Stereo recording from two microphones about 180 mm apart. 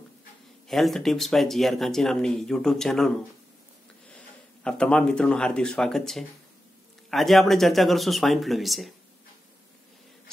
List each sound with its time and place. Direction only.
0.7 s speech: centre (ahead or behind)
4.6 s speech: 5° left (ahead or behind)